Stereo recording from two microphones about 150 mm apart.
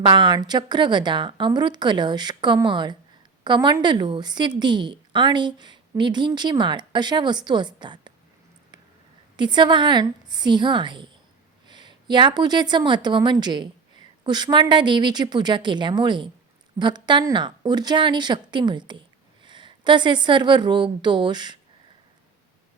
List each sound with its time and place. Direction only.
0.0 s a woman's voice: 30° right (ahead or behind)
9.3 s a woman's voice: 30° right (ahead or behind)